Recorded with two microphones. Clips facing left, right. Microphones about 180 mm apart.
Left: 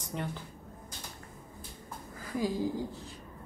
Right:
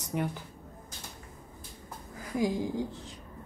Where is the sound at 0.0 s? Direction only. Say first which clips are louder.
Right 5 dB; 10° right (ahead or behind).